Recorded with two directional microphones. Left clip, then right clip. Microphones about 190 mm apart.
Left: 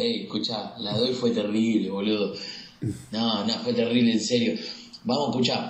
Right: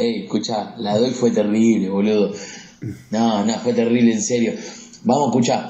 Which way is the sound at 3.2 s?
35° right (ahead or behind).